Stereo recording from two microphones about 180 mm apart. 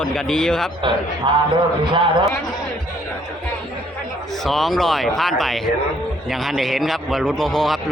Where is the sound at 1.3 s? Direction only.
25° right (ahead or behind).